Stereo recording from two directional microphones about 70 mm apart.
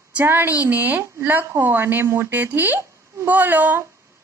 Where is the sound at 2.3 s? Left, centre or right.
Right.